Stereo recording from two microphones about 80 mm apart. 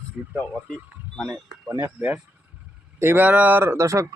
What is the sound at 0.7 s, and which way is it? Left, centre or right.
Speech, centre.